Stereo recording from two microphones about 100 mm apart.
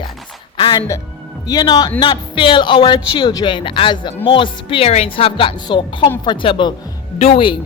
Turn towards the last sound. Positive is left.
turn(degrees=90)